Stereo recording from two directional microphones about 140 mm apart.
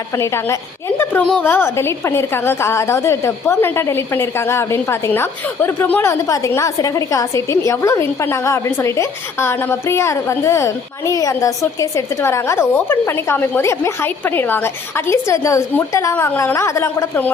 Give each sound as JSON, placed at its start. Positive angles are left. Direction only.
{"t": 0.2, "sound": "a woman's voice", "side_deg": 20}
{"t": 16.1, "sound": "a woman's voice", "side_deg": 10}